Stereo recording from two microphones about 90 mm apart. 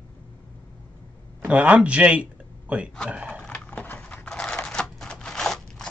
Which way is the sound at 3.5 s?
20° left (ahead or behind).